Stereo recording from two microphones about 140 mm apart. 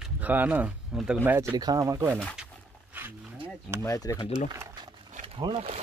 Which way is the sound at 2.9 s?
15° right (ahead or behind).